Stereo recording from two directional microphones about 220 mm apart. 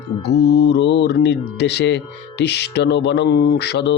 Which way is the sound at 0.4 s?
50° left (ahead or behind).